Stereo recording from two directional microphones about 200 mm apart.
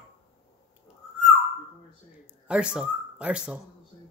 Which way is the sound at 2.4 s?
5° right (ahead or behind).